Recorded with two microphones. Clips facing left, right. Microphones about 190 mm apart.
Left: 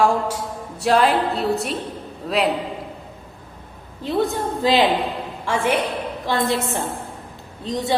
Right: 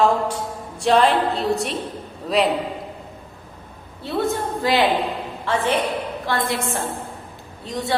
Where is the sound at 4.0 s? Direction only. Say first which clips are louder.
Left 1 dB; 15° left (ahead or behind).